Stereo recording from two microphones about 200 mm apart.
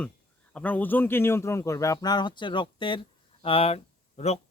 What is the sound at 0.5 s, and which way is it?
Speech, 5° left (ahead or behind).